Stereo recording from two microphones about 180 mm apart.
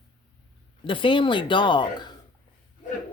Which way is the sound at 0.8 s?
25° left (ahead or behind).